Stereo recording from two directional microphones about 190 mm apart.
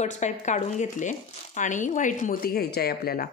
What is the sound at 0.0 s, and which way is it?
Speech, 40° left (ahead or behind).